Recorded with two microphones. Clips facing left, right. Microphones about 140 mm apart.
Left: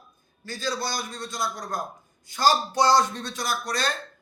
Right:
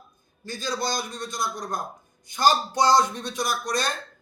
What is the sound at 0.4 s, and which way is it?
A man's voice, 20° right (ahead or behind).